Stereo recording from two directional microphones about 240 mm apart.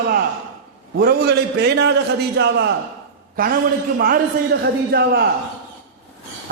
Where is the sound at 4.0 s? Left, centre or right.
Right.